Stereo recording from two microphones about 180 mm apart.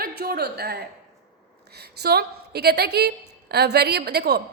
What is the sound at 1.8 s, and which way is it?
A woman's voice, 60° right (ahead or behind).